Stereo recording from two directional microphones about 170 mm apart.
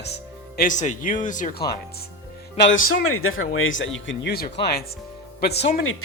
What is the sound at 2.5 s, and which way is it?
Speech, 90° left.